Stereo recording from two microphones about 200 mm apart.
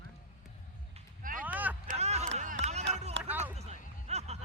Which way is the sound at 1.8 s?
35° right (ahead or behind).